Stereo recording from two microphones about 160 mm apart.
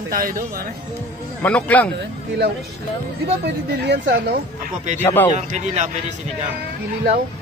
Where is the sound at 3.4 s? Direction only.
90° right.